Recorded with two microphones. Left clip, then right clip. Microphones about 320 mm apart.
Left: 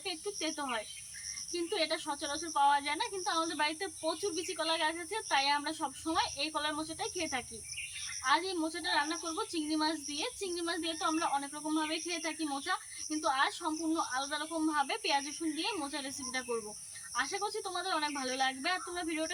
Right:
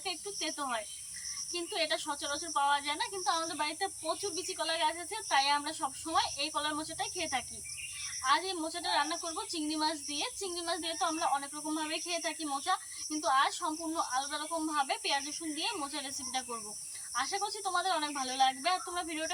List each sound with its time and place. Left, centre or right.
0.0 s speech: centre